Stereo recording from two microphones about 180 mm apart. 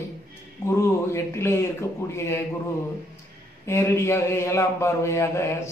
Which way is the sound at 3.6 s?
15° left (ahead or behind).